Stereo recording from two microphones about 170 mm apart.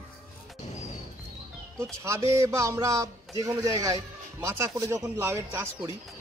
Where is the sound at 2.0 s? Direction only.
15° right (ahead or behind).